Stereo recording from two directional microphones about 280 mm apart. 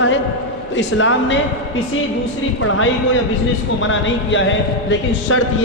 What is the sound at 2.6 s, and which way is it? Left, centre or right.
Speech, left.